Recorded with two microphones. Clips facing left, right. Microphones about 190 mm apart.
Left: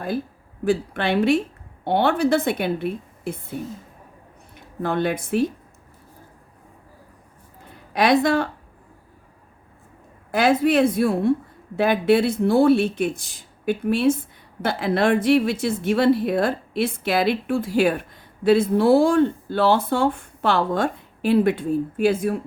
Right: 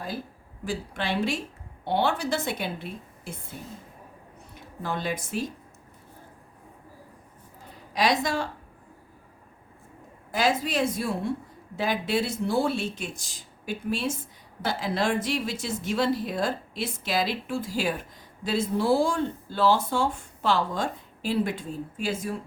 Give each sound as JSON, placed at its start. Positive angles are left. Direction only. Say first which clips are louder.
{"t": 0.6, "sound": "a woman's voice", "louder": "left 9 dB", "side_deg": 60}
{"t": 4.8, "sound": "a woman's voice", "louder": "left 8 dB", "side_deg": 60}
{"t": 7.9, "sound": "a woman's voice", "louder": "left 7 dB", "side_deg": 60}
{"t": 10.3, "sound": "a woman's voice", "louder": "left 8 dB", "side_deg": 60}